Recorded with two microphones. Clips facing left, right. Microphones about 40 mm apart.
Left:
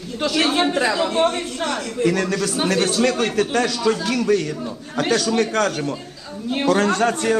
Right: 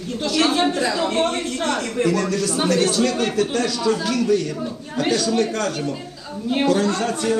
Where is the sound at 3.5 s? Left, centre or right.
Left.